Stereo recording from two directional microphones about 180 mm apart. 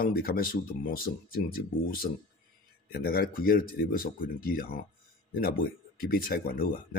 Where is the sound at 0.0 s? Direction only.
55° left (ahead or behind).